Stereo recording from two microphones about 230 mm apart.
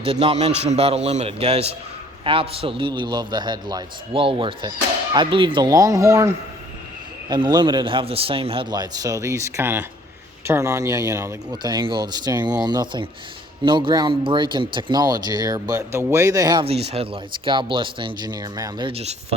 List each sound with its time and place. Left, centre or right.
0.0 s speech: right